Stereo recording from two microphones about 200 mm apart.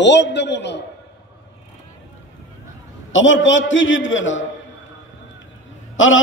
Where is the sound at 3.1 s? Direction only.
70° left (ahead or behind).